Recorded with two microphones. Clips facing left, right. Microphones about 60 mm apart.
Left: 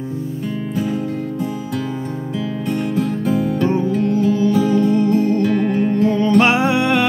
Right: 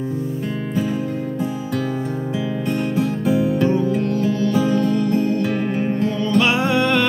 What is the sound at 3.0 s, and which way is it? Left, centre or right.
Music, centre.